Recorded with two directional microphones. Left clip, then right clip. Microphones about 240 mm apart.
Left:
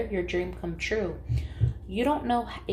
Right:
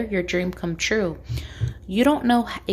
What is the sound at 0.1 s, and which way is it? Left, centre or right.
Speech, right.